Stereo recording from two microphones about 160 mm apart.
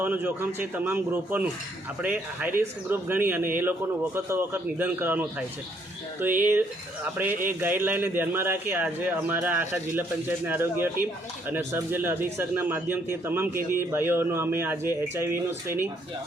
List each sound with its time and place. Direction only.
0.0 s speech: 10° right (ahead or behind)